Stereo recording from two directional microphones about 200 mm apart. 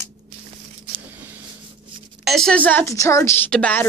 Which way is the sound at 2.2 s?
Centre (ahead or behind).